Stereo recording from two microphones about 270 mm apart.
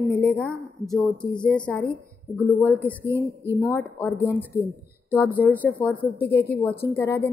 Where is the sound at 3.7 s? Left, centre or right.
Centre.